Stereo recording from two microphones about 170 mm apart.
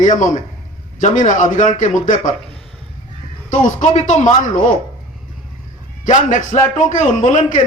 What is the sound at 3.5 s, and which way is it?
Speech, 45° left (ahead or behind).